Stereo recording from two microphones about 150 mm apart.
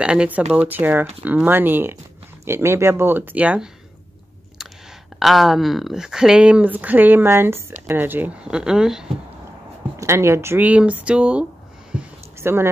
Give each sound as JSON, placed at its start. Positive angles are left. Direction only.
{"t": 0.0, "sound": "speech", "side_deg": -5}
{"t": 5.2, "sound": "speech", "side_deg": 0}
{"t": 9.9, "sound": "speech", "side_deg": -20}
{"t": 12.0, "sound": "a sound", "side_deg": -15}